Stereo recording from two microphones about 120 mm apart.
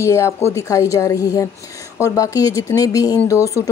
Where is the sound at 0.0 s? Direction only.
25° left (ahead or behind).